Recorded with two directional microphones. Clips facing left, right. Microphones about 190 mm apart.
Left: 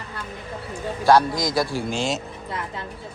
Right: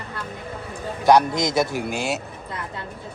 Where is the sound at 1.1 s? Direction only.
20° right (ahead or behind).